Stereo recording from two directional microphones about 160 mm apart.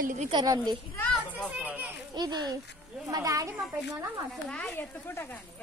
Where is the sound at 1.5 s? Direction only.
10° right (ahead or behind).